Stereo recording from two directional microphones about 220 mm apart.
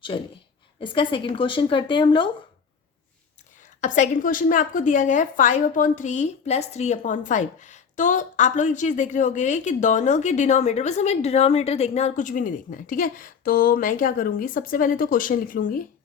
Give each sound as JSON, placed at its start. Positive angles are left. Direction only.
{"t": 0.1, "sound": "speech", "side_deg": 20}
{"t": 3.8, "sound": "a woman's voice", "side_deg": 35}